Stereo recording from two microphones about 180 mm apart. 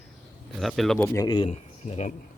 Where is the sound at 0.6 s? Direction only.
Centre (ahead or behind); by 1.4 s 20° left (ahead or behind).